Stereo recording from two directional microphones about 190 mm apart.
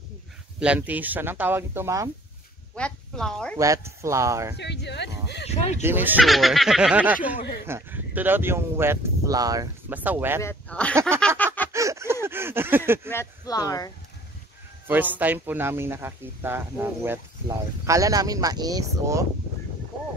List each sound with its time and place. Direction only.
0.6 s a man's voice: 5° right (ahead or behind)
2.7 s speech: 5° left (ahead or behind)
3.5 s a man's voice: 15° right (ahead or behind)
4.6 s a sound: 65° left (ahead or behind)
5.5 s speech: 35° left (ahead or behind)
5.8 s a man's voice: 10° right (ahead or behind)
10.4 s speech: 10° left (ahead or behind)
11.1 s a sound: 5° left (ahead or behind)
11.7 s a sound: 15° right (ahead or behind)
13.1 s speech: 15° left (ahead or behind)
14.9 s a man's voice: 10° right (ahead or behind)